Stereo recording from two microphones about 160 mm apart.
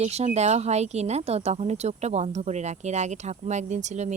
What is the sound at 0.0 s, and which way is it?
Speech, 45° right (ahead or behind).